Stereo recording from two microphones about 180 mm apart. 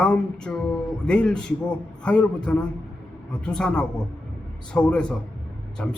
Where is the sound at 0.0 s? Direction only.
5° left (ahead or behind).